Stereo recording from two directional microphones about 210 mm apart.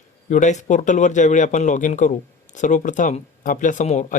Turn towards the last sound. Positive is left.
turn(degrees=35)  # may be behind; listen again after turning